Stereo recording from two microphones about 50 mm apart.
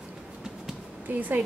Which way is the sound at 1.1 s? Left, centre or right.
Right.